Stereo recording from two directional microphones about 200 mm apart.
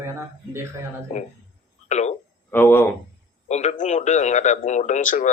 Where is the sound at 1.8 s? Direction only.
35° left (ahead or behind).